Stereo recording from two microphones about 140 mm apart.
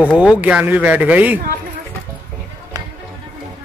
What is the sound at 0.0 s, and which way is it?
Speech, 5° right (ahead or behind).